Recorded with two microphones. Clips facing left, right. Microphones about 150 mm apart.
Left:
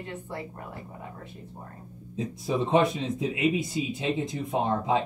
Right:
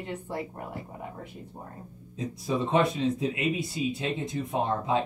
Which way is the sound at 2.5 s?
20° left (ahead or behind).